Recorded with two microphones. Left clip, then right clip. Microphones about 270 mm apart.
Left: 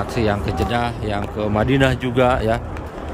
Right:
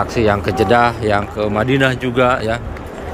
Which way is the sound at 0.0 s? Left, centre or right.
Centre.